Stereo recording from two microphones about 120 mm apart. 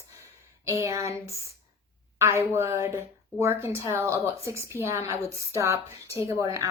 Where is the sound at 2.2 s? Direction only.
20° right (ahead or behind).